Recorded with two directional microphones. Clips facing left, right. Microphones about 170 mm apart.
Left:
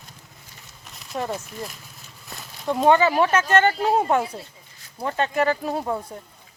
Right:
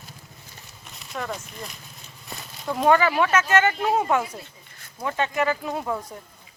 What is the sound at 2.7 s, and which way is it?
Speech, 25° left (ahead or behind).